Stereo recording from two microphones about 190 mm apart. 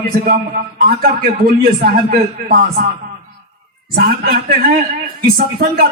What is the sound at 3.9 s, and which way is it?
Speech, 50° right (ahead or behind).